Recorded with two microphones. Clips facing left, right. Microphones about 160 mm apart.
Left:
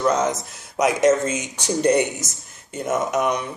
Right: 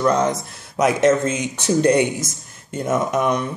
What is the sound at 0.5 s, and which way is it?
Speech, 10° left (ahead or behind).